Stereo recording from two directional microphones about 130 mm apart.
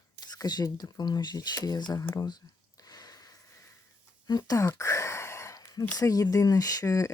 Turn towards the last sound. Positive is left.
turn(degrees=25)  # may be behind; listen again after turning